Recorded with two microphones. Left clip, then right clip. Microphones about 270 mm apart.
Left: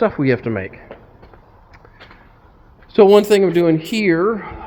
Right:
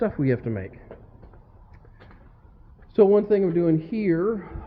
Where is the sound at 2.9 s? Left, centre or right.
Centre.